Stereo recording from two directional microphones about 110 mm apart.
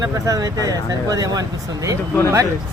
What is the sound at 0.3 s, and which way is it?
Speech, 30° right (ahead or behind).